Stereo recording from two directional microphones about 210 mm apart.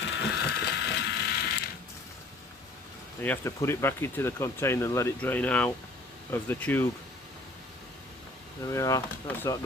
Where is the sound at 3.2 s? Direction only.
10° left (ahead or behind).